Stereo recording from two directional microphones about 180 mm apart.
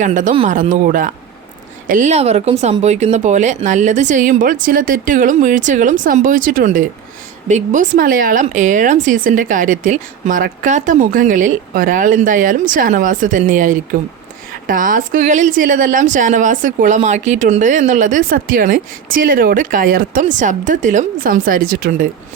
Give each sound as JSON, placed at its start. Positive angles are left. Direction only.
{"t": 0.0, "sound": "speech", "side_deg": -45}